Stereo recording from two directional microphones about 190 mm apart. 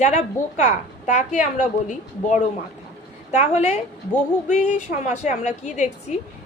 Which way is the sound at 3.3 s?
35° left (ahead or behind).